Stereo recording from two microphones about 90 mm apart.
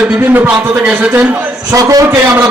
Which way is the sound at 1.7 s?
40° right (ahead or behind).